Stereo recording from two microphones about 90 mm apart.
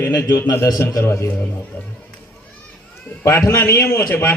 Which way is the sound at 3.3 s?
35° left (ahead or behind).